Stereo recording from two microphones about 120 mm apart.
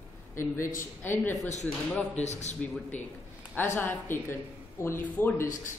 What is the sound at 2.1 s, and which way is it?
Speech, 70° left (ahead or behind).